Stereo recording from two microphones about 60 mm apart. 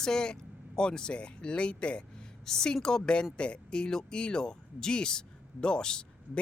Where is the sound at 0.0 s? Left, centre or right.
Centre.